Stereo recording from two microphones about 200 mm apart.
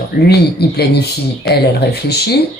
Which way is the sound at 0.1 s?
50° left (ahead or behind).